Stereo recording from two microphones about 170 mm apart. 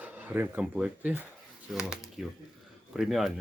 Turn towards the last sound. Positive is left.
turn(degrees=0)  # may be behind; listen again after turning